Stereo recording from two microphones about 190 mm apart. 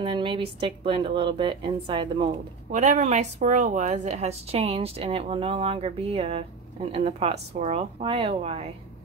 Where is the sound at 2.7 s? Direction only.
40° right (ahead or behind).